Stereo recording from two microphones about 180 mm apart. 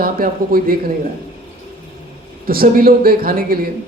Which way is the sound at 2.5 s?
55° right (ahead or behind).